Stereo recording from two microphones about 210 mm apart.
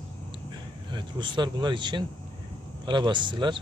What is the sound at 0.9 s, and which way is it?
Speech, 20° right (ahead or behind).